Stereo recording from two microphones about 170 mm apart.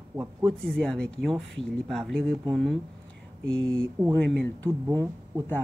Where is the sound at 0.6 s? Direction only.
5° left (ahead or behind).